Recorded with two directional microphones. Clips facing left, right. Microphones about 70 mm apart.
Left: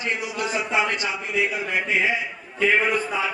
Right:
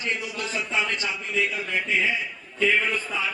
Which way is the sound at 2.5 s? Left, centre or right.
Left.